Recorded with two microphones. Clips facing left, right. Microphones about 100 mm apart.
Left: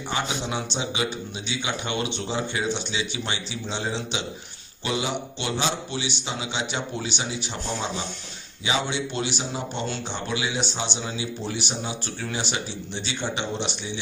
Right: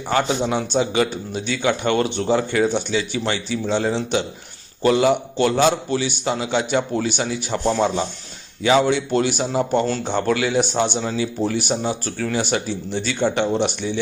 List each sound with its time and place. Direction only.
0.1 s a man's voice: 50° right (ahead or behind)